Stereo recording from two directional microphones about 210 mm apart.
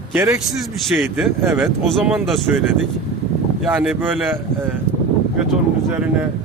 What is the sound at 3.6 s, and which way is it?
Speech, 5° right (ahead or behind).